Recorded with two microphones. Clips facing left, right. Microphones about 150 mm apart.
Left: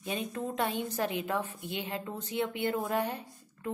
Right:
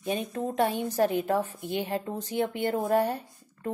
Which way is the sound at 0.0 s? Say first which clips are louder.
Right 5 dB; 35° right (ahead or behind).